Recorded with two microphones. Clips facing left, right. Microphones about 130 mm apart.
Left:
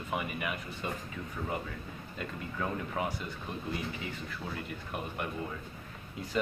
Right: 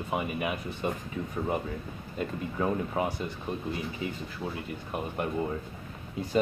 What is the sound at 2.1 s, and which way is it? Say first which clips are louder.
Speech: right 7 dB; 25° right (ahead or behind).